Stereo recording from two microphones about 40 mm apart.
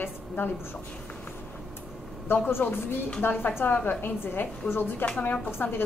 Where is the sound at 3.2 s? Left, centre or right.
Left.